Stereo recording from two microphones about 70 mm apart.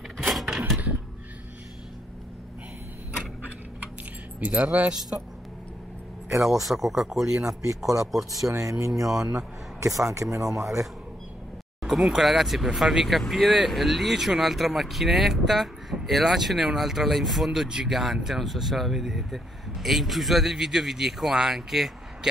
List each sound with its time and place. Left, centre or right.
0.2 s a sound: centre
4.4 s speech: right
6.7 s speech: centre
8.5 s speech: right
9.0 s speech: centre
9.8 s speech: right
10.4 s speech: centre
11.8 s speech: centre